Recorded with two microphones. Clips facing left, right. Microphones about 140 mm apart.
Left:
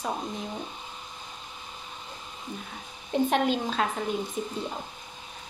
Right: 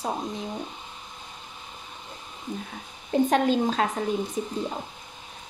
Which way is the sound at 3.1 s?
35° right (ahead or behind).